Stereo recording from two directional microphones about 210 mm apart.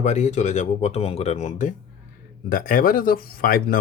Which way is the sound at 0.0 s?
35° left (ahead or behind).